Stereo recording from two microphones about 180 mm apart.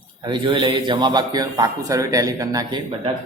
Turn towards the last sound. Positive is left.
turn(degrees=-25)  # may be behind; listen again after turning